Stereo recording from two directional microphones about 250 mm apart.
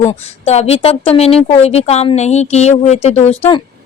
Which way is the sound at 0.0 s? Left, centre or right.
Left.